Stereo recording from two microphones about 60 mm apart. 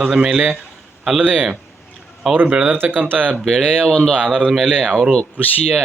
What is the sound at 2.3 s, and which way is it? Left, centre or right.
Speech, right.